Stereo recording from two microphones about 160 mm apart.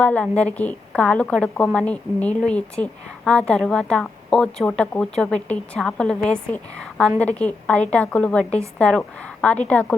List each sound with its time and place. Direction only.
0.0 s a woman's voice: 10° left (ahead or behind)